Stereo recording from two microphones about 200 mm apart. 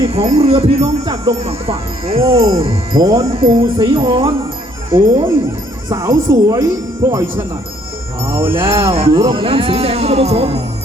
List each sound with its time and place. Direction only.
0.0 s speech: 30° right (ahead or behind)
5.9 s speech: 15° right (ahead or behind)
8.2 s jingle bell: 25° right (ahead or behind)
8.9 s speech: 25° right (ahead or behind)